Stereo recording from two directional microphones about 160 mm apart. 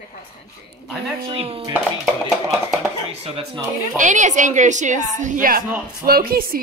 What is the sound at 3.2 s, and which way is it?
Chopping, 35° right (ahead or behind).